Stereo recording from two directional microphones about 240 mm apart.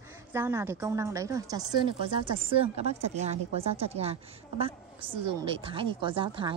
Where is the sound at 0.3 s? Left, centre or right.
Centre.